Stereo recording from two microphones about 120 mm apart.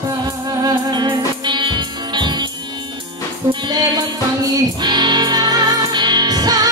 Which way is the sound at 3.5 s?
35° right (ahead or behind).